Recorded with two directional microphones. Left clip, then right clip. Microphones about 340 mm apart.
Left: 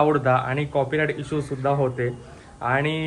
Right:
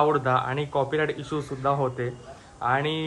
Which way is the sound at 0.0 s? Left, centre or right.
Centre.